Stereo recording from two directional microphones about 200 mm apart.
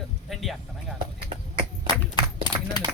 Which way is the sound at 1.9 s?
20° left (ahead or behind).